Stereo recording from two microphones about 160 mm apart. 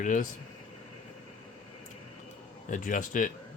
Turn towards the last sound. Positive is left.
turn(degrees=55)  # may be behind; listen again after turning